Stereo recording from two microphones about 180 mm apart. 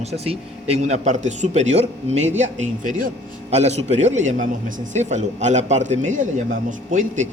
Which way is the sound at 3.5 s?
35° right (ahead or behind).